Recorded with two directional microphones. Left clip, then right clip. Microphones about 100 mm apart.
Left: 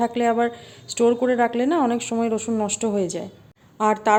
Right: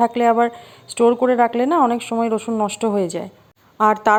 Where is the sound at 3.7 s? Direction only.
50° right (ahead or behind).